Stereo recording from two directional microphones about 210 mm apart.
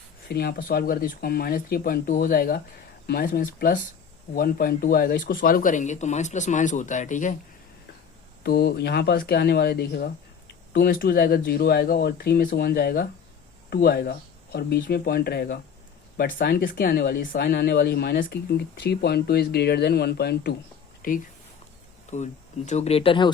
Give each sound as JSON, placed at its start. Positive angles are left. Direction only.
{"t": 0.3, "sound": "speech", "side_deg": 50}
{"t": 8.4, "sound": "speech", "side_deg": 50}